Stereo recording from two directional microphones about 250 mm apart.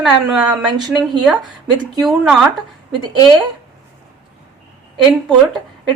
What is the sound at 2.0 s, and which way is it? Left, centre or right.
Speech, centre.